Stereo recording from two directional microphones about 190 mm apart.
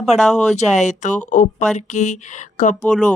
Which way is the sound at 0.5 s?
35° left (ahead or behind).